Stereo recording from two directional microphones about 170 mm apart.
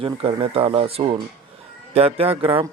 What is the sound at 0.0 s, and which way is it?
Speech, 35° right (ahead or behind).